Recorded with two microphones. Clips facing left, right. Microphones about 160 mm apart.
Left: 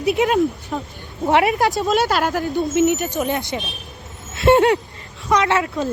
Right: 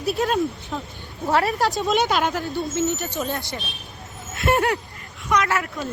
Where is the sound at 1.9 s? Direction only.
5° left (ahead or behind).